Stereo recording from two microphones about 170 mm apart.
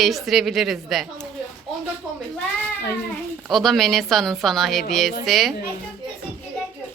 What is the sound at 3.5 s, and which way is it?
A woman's voice, centre (ahead or behind).